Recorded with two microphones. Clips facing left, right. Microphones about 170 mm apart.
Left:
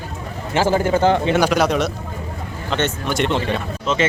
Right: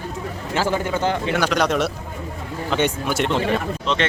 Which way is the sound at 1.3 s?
10° left (ahead or behind).